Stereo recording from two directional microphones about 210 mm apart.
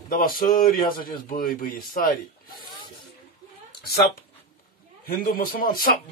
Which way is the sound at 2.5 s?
20° left (ahead or behind).